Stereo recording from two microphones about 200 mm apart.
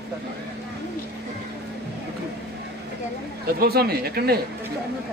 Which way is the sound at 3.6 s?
50° right (ahead or behind).